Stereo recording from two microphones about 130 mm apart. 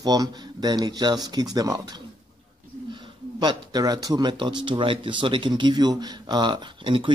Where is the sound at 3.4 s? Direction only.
30° right (ahead or behind).